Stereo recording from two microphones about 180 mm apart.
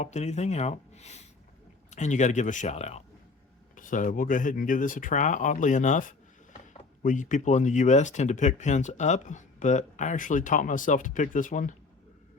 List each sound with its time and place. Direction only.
0.0 s speech: 40° left (ahead or behind)